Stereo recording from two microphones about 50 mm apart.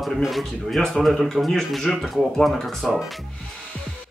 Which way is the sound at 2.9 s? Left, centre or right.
Centre.